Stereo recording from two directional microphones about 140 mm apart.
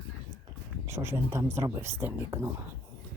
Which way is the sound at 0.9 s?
20° right (ahead or behind).